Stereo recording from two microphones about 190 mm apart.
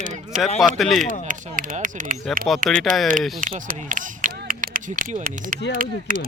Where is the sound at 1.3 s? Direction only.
45° right (ahead or behind).